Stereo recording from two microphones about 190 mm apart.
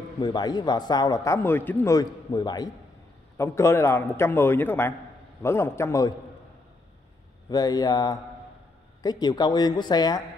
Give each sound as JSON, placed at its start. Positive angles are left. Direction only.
{"t": 0.2, "sound": "a man's voice", "side_deg": 20}
{"t": 7.4, "sound": "a man's voice", "side_deg": 20}